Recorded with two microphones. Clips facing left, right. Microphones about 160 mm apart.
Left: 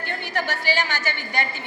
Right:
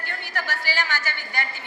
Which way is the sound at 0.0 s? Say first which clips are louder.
Left 5 dB; 20° left (ahead or behind).